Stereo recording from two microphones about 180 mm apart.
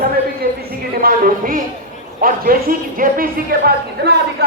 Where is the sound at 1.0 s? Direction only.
50° right (ahead or behind).